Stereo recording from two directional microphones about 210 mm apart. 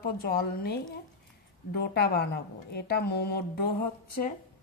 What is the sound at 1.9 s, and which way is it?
A woman's voice, 50° left (ahead or behind).